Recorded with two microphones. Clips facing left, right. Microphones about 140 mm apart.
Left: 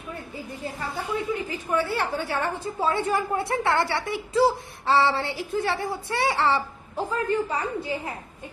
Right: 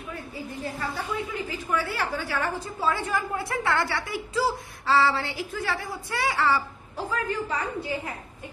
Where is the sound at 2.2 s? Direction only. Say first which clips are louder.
Left 2 dB; 25° left (ahead or behind).